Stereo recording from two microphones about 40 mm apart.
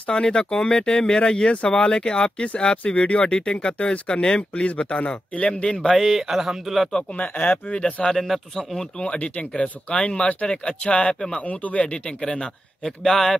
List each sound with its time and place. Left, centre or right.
0.1 s speech: left
5.7 s speech: centre
5.9 s speech: centre
7.2 s speech: left
7.5 s speech: left
9.0 s speech: left
11.4 s speech: left
12.2 s speech: centre
13.0 s speech: centre